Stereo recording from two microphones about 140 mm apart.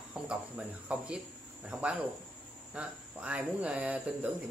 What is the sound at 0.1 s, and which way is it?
Speech, 10° right (ahead or behind).